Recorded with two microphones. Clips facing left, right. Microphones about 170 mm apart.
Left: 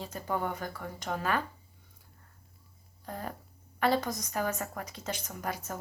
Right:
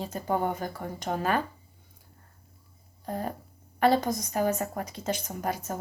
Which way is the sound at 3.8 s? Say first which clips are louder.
Right 5 dB; 20° right (ahead or behind).